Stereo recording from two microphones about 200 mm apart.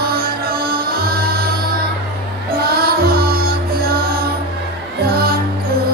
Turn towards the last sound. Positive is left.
turn(degrees=-50)  # may be behind; listen again after turning